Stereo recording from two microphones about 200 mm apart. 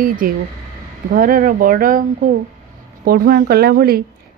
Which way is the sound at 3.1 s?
50° right (ahead or behind).